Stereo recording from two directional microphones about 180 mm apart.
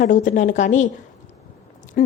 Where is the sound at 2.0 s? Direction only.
50° left (ahead or behind).